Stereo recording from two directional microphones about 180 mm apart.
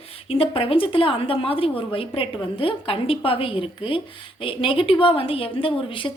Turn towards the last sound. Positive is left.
turn(degrees=30)  # may be behind; listen again after turning